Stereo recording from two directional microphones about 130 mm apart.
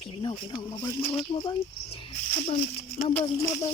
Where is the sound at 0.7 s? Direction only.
25° left (ahead or behind).